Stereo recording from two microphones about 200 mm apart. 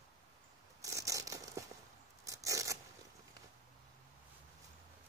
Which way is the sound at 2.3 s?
15° right (ahead or behind).